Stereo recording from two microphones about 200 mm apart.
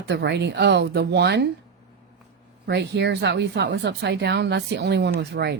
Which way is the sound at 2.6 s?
60° right (ahead or behind).